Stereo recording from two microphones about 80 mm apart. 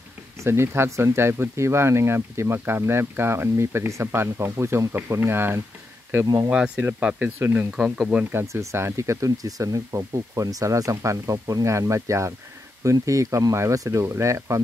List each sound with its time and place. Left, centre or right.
0.4 s speech: right
6.5 s speech: centre
7.2 s speech: right
7.7 s speech: centre
8.3 s speech: right